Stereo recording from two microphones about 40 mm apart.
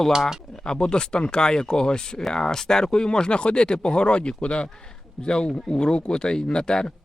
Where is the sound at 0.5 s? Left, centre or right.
Centre.